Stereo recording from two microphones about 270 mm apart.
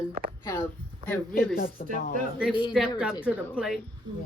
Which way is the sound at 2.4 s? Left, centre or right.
Centre.